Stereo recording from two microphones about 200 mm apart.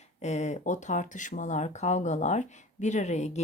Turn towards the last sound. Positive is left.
turn(degrees=35)  # may be behind; listen again after turning